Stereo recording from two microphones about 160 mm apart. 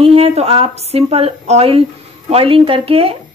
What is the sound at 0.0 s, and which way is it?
A woman's voice, 35° right (ahead or behind).